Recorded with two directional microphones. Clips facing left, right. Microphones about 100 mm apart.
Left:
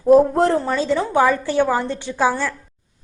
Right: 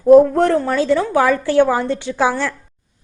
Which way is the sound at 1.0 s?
15° left (ahead or behind).